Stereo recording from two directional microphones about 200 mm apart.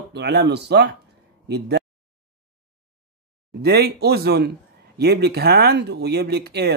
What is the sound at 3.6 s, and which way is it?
Speech, 50° right (ahead or behind).